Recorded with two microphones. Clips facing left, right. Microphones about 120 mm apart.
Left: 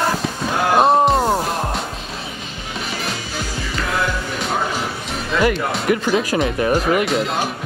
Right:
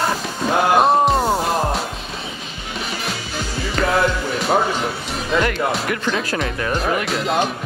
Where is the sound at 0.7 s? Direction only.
Centre (ahead or behind).